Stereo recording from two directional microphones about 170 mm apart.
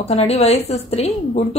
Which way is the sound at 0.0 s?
40° left (ahead or behind).